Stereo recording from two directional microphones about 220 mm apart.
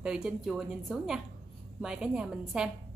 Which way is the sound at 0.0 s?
5° right (ahead or behind).